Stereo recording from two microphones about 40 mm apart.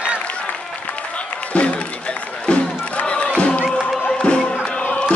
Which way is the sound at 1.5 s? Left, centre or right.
Left.